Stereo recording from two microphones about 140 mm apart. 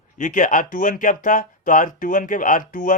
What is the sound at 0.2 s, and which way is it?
Speech, 70° left (ahead or behind).